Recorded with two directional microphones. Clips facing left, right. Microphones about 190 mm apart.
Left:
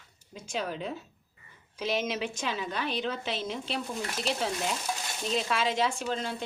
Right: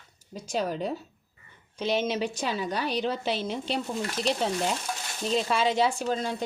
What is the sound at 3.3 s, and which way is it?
Speech, centre (ahead or behind).